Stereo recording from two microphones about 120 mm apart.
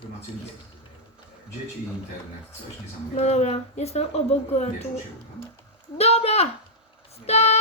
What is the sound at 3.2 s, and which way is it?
Speech, 60° left (ahead or behind).